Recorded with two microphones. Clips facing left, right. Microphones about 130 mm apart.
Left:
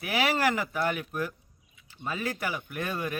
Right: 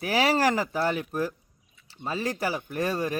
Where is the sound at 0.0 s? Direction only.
35° right (ahead or behind).